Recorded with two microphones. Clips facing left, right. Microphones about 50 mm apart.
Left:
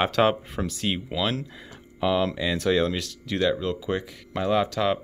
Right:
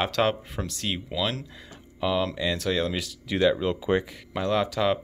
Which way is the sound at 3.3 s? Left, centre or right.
Centre.